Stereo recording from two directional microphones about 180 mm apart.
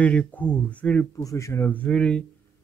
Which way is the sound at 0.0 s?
10° left (ahead or behind).